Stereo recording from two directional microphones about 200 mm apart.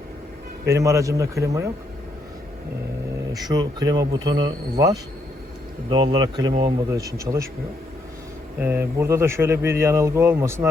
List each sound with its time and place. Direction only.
0.7 s speech: 15° right (ahead or behind)
3.5 s speech: 20° right (ahead or behind)
8.6 s speech: 10° right (ahead or behind)